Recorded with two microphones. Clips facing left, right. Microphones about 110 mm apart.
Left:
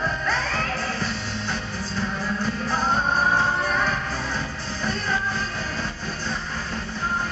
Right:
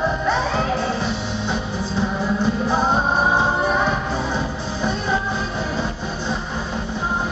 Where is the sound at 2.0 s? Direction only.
25° right (ahead or behind).